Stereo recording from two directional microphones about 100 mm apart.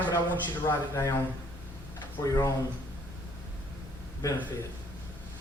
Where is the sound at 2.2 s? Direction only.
35° left (ahead or behind).